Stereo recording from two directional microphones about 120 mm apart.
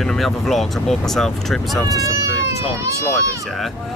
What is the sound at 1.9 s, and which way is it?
Speech, 30° right (ahead or behind).